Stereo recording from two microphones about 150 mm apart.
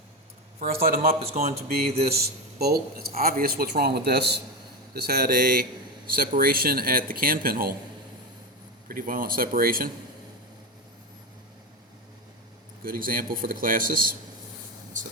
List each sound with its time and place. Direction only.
0.6 s speech: 80° right
1.4 s speech: 65° right (ahead or behind)
2.0 s a man's voice: 90° right
3.2 s a man's voice: 75° right (ahead or behind)
8.9 s speech: 70° right (ahead or behind)
12.8 s speech: 70° right (ahead or behind)